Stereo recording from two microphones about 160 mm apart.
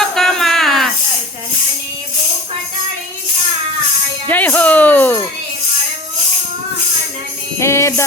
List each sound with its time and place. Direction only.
0.0 s a sound: centre (ahead or behind)
4.3 s speech: 10° left (ahead or behind)
7.6 s speech: 15° left (ahead or behind)